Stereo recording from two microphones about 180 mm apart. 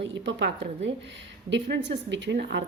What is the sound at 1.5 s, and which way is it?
A woman's voice, 80° right.